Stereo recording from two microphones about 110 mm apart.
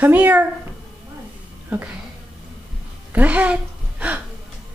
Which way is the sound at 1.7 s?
15° right (ahead or behind).